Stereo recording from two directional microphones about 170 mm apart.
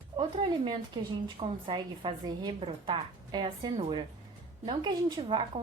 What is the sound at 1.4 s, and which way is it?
A woman's voice, 30° right (ahead or behind).